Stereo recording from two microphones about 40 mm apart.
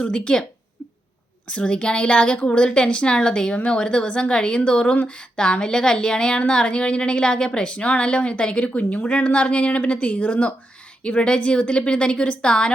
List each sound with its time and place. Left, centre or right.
0.0 s a woman's voice: left
1.5 s a woman's voice: left